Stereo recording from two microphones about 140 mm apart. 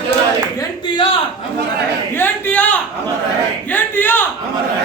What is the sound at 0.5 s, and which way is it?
Speech, 35° left (ahead or behind).